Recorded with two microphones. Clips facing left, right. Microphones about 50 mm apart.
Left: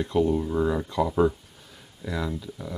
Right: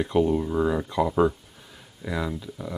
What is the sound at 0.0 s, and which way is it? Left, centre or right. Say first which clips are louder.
Speech: right 1 dB; centre.